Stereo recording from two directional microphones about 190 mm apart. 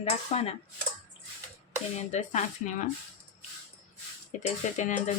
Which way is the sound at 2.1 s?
40° left (ahead or behind).